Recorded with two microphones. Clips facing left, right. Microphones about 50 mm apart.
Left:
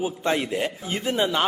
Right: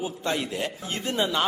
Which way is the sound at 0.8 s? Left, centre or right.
Centre.